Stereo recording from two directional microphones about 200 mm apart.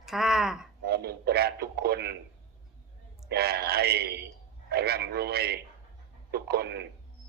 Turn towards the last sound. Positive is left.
turn(degrees=-55)  # may be behind; listen again after turning